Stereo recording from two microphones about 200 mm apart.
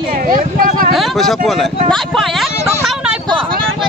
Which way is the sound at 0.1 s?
45° right (ahead or behind).